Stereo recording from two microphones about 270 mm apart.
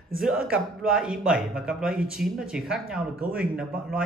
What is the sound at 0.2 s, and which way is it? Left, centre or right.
A man's voice, centre.